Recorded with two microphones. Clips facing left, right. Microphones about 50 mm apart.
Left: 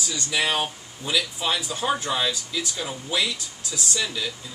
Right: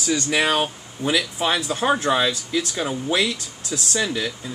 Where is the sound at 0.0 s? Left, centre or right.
Right.